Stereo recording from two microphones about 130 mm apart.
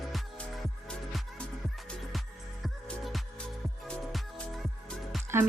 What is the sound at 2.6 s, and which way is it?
Music, centre (ahead or behind).